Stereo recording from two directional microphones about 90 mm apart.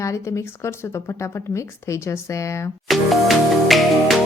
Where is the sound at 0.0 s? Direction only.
35° left (ahead or behind).